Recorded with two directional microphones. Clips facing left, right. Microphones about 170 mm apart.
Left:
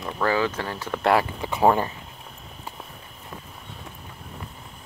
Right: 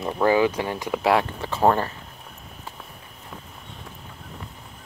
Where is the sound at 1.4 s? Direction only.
10° left (ahead or behind).